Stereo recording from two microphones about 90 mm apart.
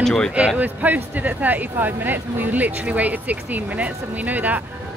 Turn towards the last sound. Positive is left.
turn(degrees=-20)  # may be behind; listen again after turning